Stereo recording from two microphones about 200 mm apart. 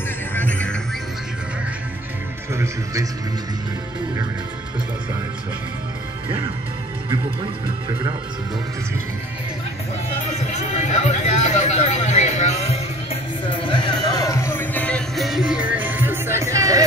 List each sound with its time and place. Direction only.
0.3 s music: 10° left (ahead or behind)
2.5 s speech: 15° right (ahead or behind)
10.5 s chatter: 35° left (ahead or behind); by 16.8 s 15° right (ahead or behind)